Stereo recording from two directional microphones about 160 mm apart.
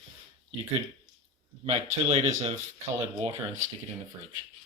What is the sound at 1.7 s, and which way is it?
Speech, 45° right (ahead or behind).